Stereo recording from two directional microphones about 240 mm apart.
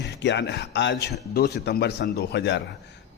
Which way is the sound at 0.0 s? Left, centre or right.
Left.